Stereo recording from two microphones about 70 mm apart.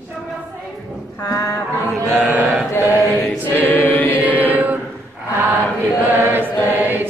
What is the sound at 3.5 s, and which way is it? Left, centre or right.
Chant, left.